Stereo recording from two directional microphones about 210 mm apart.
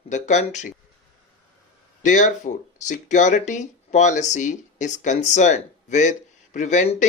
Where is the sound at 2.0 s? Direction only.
35° left (ahead or behind).